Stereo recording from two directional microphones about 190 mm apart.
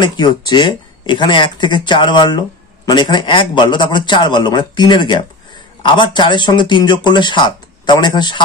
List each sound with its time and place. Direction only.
0.0 s speech: 20° left (ahead or behind)